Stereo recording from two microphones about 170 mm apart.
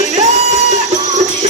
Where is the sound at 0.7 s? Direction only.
40° right (ahead or behind).